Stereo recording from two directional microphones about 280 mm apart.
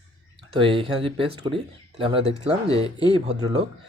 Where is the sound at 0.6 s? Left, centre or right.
Centre.